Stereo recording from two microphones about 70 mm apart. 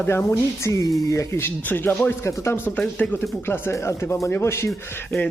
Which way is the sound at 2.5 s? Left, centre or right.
Left.